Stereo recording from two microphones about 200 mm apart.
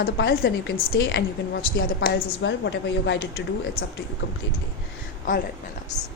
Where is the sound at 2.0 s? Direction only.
55° left (ahead or behind).